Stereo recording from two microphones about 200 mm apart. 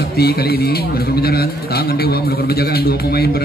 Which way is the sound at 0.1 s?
50° left (ahead or behind).